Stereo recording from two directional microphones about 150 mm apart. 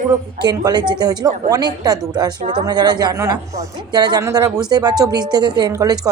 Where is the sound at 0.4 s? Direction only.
30° right (ahead or behind).